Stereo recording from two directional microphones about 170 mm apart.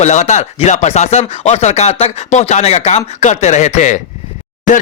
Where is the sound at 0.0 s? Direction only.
45° left (ahead or behind).